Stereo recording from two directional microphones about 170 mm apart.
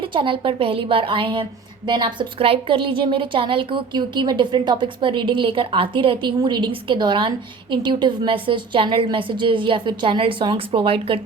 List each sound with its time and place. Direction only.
0.0 s a woman's voice: 30° right (ahead or behind)